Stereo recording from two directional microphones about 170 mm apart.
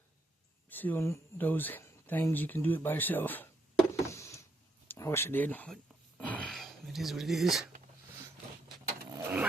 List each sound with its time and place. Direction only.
0.7 s speech: 10° left (ahead or behind)
3.9 s a sound: 15° left (ahead or behind)
4.9 s speech: 15° left (ahead or behind); by 7.7 s centre (ahead or behind)
9.1 s vehicle: 10° right (ahead or behind)